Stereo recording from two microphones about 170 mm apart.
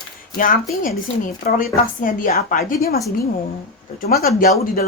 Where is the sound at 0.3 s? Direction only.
55° left (ahead or behind).